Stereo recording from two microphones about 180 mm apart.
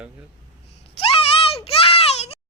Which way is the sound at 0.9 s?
35° left (ahead or behind).